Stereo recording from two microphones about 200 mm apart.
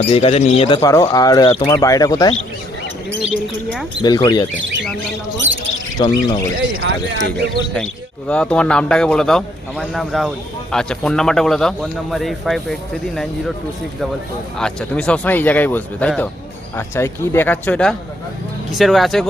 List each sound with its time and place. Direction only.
0.1 s speech: 30° left (ahead or behind)
0.8 s speech: 15° left (ahead or behind)
4.0 s speech: 20° left (ahead or behind)
5.5 s a sound: 70° right (ahead or behind)
6.0 s speech: 20° left (ahead or behind)
6.8 s speech: 60° right (ahead or behind)
8.3 s a man's voice: 5° left (ahead or behind)
14.6 s a man's voice: 5° left (ahead or behind)